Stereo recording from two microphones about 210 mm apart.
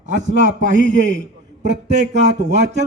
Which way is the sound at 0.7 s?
60° right (ahead or behind).